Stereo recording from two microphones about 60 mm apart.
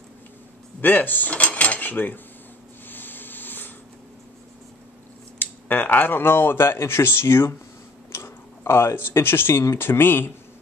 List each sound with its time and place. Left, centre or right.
0.7 s cutlery: left
2.9 s a sound: left
5.4 s speech: left